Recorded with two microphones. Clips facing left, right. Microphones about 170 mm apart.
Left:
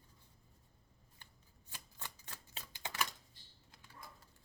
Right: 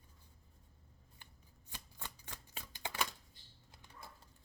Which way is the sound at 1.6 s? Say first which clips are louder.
Right 1 dB; 20° right (ahead or behind).